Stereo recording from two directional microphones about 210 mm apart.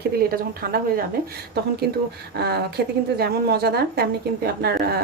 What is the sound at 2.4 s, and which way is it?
Speech, 50° right (ahead or behind).